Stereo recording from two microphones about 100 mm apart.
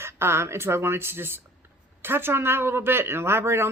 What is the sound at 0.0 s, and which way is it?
A woman's voice, 25° right (ahead or behind).